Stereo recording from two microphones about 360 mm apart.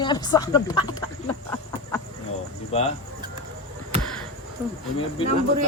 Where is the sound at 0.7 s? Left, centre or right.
Right.